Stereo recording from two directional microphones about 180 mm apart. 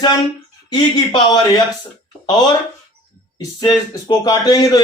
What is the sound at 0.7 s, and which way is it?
Speech, 25° left (ahead or behind).